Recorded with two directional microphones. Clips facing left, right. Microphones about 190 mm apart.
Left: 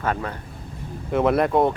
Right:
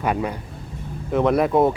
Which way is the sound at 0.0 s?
15° right (ahead or behind).